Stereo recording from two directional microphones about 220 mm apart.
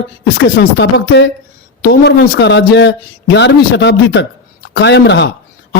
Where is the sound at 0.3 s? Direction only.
50° left (ahead or behind).